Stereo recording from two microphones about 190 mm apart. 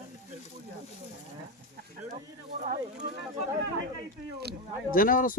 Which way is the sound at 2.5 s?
45° right (ahead or behind).